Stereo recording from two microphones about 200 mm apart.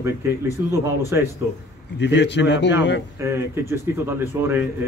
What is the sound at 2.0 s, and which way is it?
Speech, 60° left (ahead or behind).